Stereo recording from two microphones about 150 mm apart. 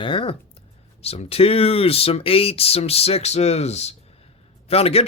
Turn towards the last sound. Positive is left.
turn(degrees=45)  # may be behind; listen again after turning